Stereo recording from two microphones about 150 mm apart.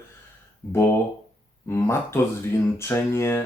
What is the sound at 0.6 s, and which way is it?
Speech, 5° left (ahead or behind).